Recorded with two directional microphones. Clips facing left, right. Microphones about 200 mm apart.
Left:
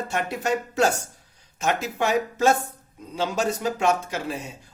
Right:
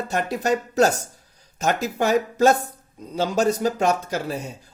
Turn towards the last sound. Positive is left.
turn(degrees=-40)  # may be behind; listen again after turning